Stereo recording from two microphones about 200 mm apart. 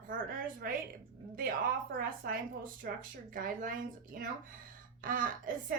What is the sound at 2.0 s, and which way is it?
A woman's voice, 45° right (ahead or behind).